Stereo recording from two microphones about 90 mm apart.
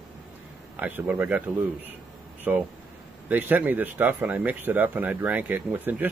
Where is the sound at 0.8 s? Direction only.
20° right (ahead or behind).